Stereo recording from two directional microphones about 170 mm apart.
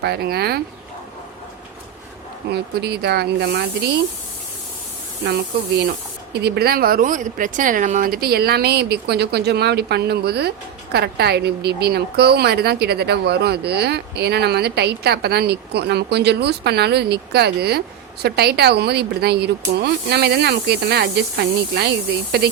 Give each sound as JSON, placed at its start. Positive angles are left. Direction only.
{"t": 0.0, "sound": "a woman's voice", "side_deg": -70}
{"t": 2.5, "sound": "a woman's voice", "side_deg": -75}
{"t": 5.2, "sound": "a woman's voice", "side_deg": -80}